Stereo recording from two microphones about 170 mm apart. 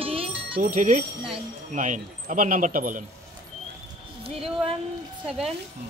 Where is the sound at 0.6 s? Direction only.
50° right (ahead or behind).